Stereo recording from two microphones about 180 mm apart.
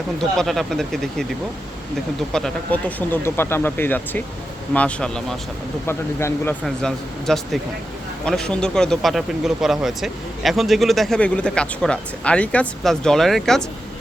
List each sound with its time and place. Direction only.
0.2 s speech: centre (ahead or behind)
2.3 s speech: 5° left (ahead or behind)
6.7 s speech: centre (ahead or behind)